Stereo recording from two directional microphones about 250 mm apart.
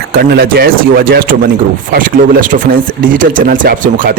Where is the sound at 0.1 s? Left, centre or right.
Right.